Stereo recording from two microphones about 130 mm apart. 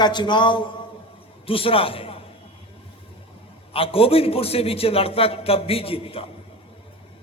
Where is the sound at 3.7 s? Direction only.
45° left (ahead or behind).